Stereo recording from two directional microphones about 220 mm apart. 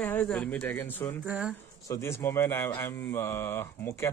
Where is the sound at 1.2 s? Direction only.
5° right (ahead or behind).